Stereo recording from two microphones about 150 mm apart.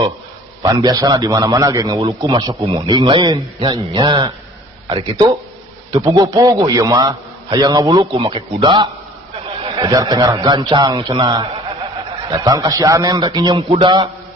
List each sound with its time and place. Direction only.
0.6 s a man's voice: 25° right (ahead or behind)
2.0 s a man's voice: 35° right (ahead or behind)
5.9 s a man's voice: 25° right (ahead or behind)